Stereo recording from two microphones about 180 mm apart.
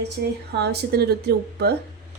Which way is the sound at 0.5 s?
65° right (ahead or behind).